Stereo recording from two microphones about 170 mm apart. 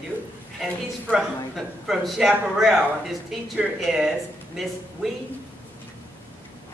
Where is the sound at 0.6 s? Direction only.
Centre (ahead or behind).